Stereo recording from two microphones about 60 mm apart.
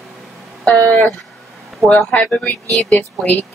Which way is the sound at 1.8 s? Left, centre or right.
Centre.